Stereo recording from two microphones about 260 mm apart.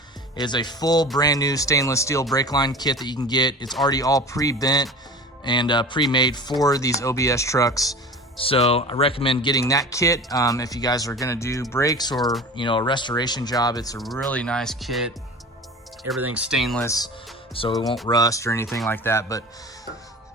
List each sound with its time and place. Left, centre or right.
0.3 s speech: centre
14.0 s speech: centre